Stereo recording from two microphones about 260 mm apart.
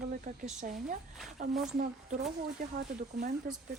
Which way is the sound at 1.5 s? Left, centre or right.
Centre.